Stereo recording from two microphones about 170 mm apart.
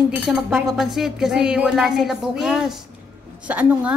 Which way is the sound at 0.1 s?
5° right (ahead or behind).